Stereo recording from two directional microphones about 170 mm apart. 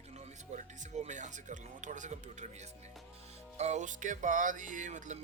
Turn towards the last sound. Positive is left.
turn(degrees=-45)  # may be behind; listen again after turning